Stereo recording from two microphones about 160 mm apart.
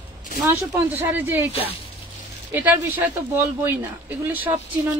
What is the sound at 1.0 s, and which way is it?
Speech, 15° right (ahead or behind).